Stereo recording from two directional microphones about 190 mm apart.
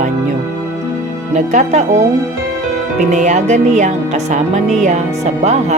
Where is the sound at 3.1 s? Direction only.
40° right (ahead or behind).